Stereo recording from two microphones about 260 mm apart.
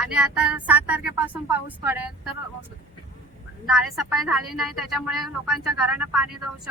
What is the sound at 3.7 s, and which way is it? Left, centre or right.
A woman's voice, centre.